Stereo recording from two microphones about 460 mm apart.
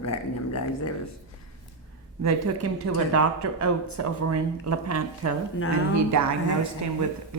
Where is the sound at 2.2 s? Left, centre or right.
Right.